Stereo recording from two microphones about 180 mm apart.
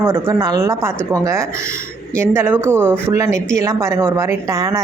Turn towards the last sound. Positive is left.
turn(degrees=-20)  # may be behind; listen again after turning